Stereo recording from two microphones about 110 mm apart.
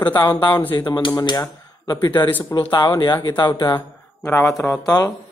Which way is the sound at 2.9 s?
40° left (ahead or behind).